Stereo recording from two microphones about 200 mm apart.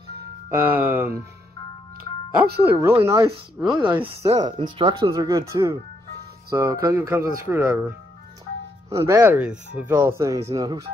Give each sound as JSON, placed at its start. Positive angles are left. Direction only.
{"t": 0.5, "sound": "speech", "side_deg": -10}
{"t": 2.6, "sound": "speech", "side_deg": -10}
{"t": 3.5, "sound": "speech", "side_deg": -5}
{"t": 3.8, "sound": "speech", "side_deg": -25}
{"t": 8.9, "sound": "speech", "side_deg": -15}